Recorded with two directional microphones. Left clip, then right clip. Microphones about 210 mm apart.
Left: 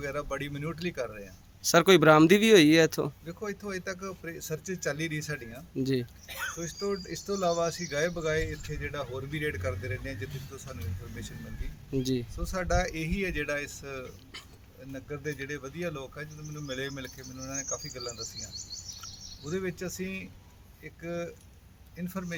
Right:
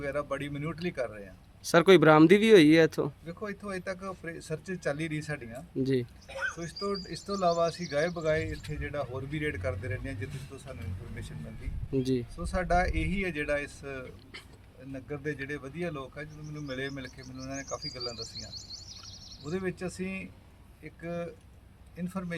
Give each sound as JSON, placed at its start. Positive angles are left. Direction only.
{"t": 0.0, "sound": "speech", "side_deg": 0}
{"t": 6.2, "sound": "speech", "side_deg": 50}
{"t": 6.6, "sound": "speech", "side_deg": 0}
{"t": 11.9, "sound": "speech", "side_deg": 0}
{"t": 18.2, "sound": "speech", "side_deg": -20}
{"t": 19.5, "sound": "speech", "side_deg": 0}